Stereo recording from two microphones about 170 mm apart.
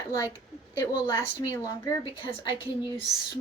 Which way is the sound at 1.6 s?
20° left (ahead or behind).